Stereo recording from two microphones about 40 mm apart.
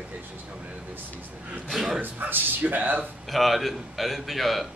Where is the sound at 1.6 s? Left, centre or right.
Centre.